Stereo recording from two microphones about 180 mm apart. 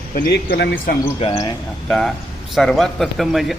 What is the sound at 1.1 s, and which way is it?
Speech, 35° left (ahead or behind).